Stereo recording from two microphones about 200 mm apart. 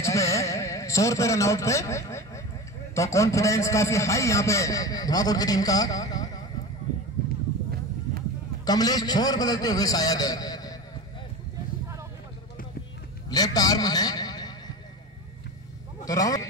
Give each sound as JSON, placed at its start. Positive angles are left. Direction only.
{"t": 0.0, "sound": "a sound", "side_deg": 15}
{"t": 2.9, "sound": "a man's voice", "side_deg": 15}
{"t": 8.6, "sound": "a man's voice", "side_deg": 20}
{"t": 13.3, "sound": "a man's voice", "side_deg": 20}
{"t": 16.1, "sound": "a man's voice", "side_deg": 20}